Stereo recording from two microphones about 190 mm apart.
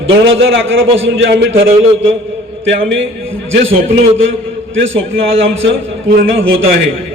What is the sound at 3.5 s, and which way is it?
A man's voice, 85° right.